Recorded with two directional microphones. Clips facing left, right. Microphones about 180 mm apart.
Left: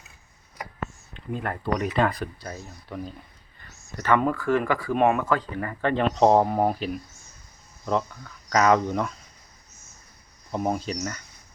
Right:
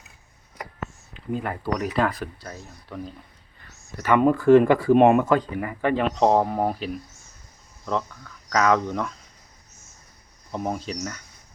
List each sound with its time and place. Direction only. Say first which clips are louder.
1.1 s speech: right 3 dB; 5° right (ahead or behind)
4.0 s speech: right 5 dB; 15° right (ahead or behind)
6.1 s speech: left 3 dB; 5° left (ahead or behind)
8.4 s speech: left 1 dB; 5° left (ahead or behind)
10.5 s speech: left 2 dB; 5° left (ahead or behind)